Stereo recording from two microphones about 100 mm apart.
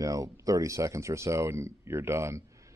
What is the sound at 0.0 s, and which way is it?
Speech, 35° right (ahead or behind).